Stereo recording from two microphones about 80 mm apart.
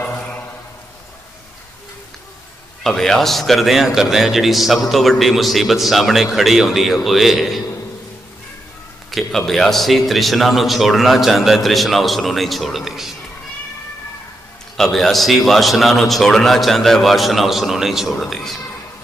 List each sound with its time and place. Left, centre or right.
2.8 s a man's voice: centre
9.1 s a man's voice: centre
14.8 s a man's voice: centre